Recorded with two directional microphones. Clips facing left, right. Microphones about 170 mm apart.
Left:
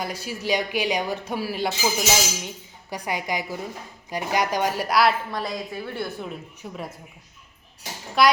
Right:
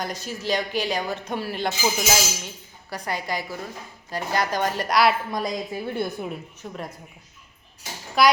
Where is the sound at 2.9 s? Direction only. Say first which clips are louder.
Left 1 dB; 15° left (ahead or behind).